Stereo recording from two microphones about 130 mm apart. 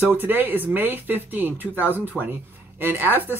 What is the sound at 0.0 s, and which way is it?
Speech, 15° right (ahead or behind).